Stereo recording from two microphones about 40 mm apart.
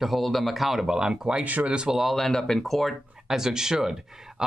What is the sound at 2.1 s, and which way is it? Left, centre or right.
Speech, centre.